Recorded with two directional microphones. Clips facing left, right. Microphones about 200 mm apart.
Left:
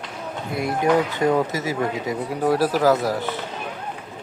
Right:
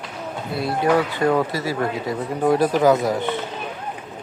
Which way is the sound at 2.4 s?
5° left (ahead or behind).